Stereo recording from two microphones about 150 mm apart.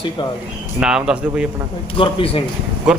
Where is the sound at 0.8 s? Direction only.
5° right (ahead or behind).